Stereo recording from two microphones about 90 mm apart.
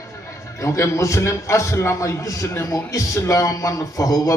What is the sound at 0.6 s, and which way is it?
A man's voice, 35° left (ahead or behind).